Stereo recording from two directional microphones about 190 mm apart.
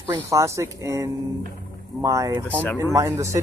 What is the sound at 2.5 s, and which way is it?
Speech, 5° left (ahead or behind).